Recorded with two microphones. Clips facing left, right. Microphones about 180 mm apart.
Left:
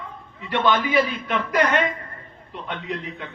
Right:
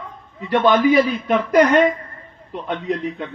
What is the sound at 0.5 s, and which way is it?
A man's voice, 45° right (ahead or behind).